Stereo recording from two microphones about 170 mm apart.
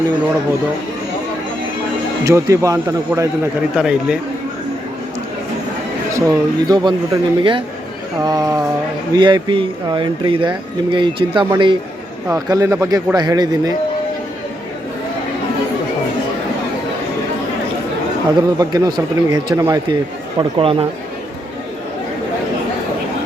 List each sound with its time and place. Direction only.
2.2 s a man's voice: 15° right (ahead or behind)
6.1 s a man's voice: 20° right (ahead or behind)
18.3 s speech: 25° right (ahead or behind)
20.4 s speech: 30° right (ahead or behind)